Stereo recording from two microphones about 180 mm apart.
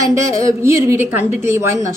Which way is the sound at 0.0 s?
15° right (ahead or behind).